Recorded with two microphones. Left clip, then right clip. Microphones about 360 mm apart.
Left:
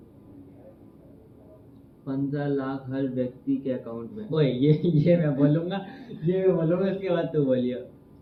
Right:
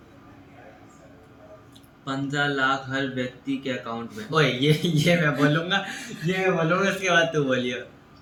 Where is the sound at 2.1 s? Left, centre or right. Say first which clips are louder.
Right 3 dB; centre.